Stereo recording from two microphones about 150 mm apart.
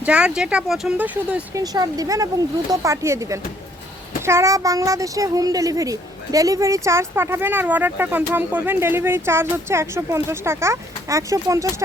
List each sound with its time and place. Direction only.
0.0 s a child's voice: 10° right (ahead or behind)
1.5 s a child's voice: 25° right (ahead or behind)